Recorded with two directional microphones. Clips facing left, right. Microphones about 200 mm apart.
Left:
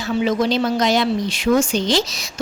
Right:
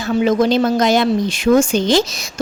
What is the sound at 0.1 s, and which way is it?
Speech, 50° right (ahead or behind).